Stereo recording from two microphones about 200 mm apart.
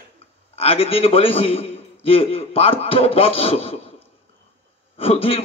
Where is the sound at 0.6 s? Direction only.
30° left (ahead or behind).